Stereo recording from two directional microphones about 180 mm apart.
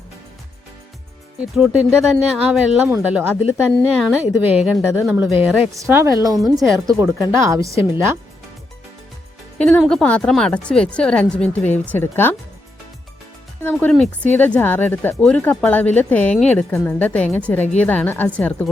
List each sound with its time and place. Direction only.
1.4 s a woman's voice: 5° right (ahead or behind)
9.6 s speech: 5° left (ahead or behind)
13.7 s speech: centre (ahead or behind)